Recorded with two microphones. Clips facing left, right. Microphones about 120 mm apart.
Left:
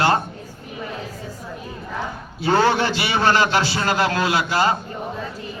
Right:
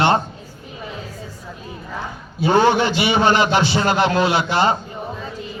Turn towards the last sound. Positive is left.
turn(degrees=-25)  # may be behind; listen again after turning